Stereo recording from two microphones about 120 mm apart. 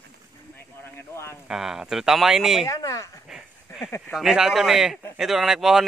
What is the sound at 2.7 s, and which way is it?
Speech, 30° left (ahead or behind).